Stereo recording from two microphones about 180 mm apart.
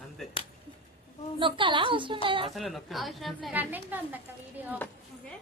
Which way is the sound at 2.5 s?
Centre (ahead or behind).